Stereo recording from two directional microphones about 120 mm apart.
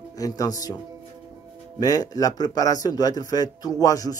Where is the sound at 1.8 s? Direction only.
35° left (ahead or behind).